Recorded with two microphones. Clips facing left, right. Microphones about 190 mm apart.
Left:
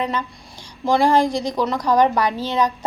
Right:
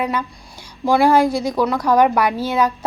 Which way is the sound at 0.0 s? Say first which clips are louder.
Right 2 dB; 10° right (ahead or behind).